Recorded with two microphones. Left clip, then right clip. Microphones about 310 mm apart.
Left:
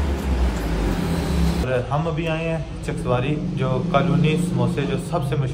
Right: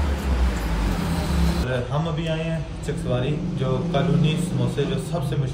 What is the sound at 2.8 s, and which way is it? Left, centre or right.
A man's voice, left.